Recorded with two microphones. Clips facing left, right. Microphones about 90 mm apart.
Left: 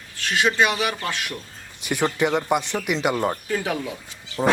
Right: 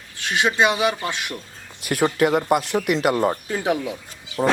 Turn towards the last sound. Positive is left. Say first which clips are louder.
# even
turn(degrees=-5)  # may be behind; listen again after turning